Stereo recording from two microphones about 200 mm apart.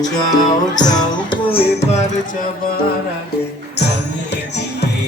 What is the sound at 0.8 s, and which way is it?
Speech, 20° left (ahead or behind).